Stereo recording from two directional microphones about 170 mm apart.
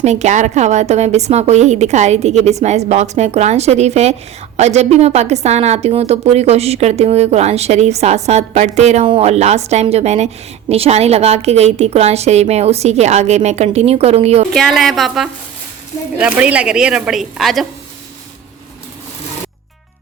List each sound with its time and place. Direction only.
0.0 s a woman's voice: 40° right (ahead or behind)
14.5 s a woman's voice: centre (ahead or behind)